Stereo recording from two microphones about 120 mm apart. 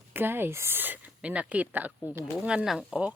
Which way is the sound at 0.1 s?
15° right (ahead or behind).